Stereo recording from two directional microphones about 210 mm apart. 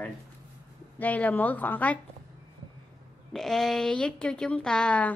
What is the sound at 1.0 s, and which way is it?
Speech, 5° left (ahead or behind).